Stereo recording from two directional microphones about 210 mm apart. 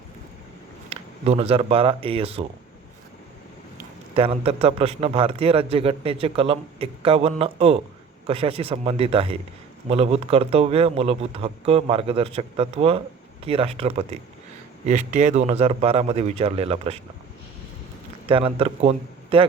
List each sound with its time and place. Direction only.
0.9 s speech: 30° right (ahead or behind)
4.1 s a man's voice: 30° right (ahead or behind)
18.3 s speech: 25° right (ahead or behind)